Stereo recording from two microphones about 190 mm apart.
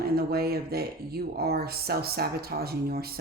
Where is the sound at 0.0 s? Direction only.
55° right (ahead or behind).